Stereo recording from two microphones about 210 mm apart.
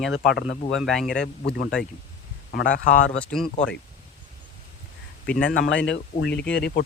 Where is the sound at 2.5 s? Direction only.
40° left (ahead or behind).